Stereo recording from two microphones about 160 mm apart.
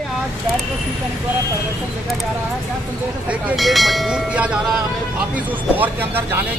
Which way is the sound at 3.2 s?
10° right (ahead or behind).